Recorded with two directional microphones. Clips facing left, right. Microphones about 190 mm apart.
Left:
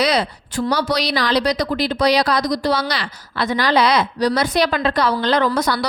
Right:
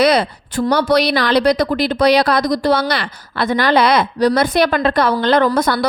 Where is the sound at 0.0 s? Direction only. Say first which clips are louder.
Right 5 dB; 55° right (ahead or behind).